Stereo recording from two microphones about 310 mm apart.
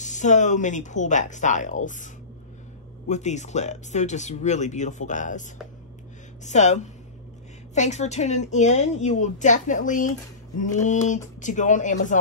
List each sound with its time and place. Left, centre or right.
0.0 s speech: left
3.1 s speech: left
6.4 s speech: left